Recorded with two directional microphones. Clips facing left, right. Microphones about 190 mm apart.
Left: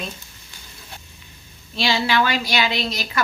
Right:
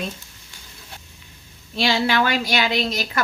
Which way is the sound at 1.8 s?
50° right (ahead or behind).